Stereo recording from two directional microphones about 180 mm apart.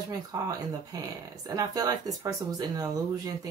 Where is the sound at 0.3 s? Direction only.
20° right (ahead or behind).